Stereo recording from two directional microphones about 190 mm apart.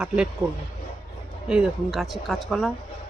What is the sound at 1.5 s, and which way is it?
Speech, 5° right (ahead or behind).